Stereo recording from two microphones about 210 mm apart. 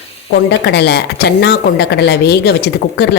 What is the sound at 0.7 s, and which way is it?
A woman's voice, 55° left (ahead or behind).